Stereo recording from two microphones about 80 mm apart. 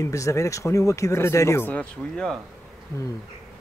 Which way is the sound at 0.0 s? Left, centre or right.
Left.